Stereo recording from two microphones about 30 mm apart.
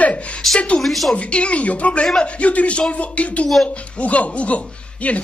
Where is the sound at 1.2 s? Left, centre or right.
Left.